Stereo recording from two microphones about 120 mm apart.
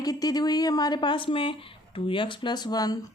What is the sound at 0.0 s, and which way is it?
A woman's voice, 30° left (ahead or behind).